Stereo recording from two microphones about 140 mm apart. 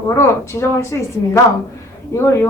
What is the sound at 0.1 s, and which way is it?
A woman's voice, 20° left (ahead or behind).